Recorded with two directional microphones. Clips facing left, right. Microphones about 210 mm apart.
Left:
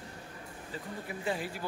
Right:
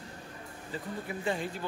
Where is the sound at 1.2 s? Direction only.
5° left (ahead or behind).